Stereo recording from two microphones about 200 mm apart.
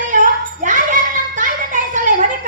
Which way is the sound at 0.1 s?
40° right (ahead or behind).